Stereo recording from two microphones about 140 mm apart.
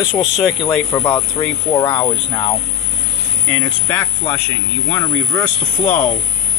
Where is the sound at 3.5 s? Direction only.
15° left (ahead or behind).